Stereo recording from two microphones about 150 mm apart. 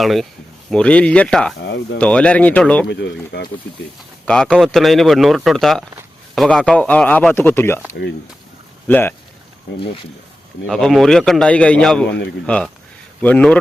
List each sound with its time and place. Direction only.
0.0 s a man's voice: centre (ahead or behind)
3.3 s speech: 90° left
4.3 s a man's voice: 5° left (ahead or behind)
8.9 s speech: 15° left (ahead or behind)
10.7 s a man's voice: 5° left (ahead or behind)